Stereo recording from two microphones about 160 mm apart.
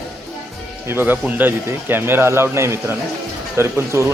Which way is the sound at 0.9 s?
15° right (ahead or behind).